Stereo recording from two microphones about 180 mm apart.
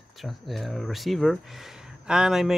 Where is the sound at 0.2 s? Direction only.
Centre (ahead or behind).